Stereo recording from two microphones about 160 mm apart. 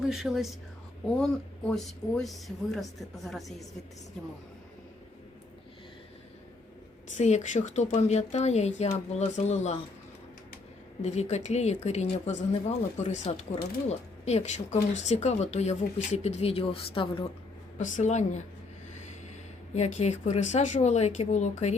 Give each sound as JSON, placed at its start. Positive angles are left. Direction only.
{"t": 0.1, "sound": "speech", "side_deg": 0}
{"t": 7.2, "sound": "speech", "side_deg": 50}
{"t": 11.0, "sound": "speech", "side_deg": 45}
{"t": 17.7, "sound": "speech", "side_deg": 50}
{"t": 19.7, "sound": "speech", "side_deg": 45}